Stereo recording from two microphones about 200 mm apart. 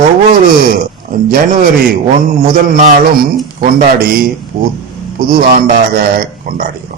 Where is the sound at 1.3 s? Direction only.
45° right (ahead or behind).